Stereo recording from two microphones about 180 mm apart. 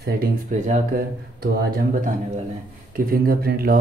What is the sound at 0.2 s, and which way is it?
Speech, 55° right (ahead or behind).